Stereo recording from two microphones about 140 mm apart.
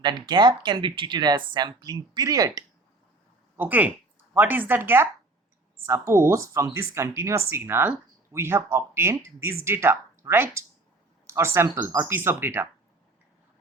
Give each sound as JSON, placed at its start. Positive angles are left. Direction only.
{"t": 0.0, "sound": "speech", "side_deg": -30}
{"t": 3.6, "sound": "speech", "side_deg": -10}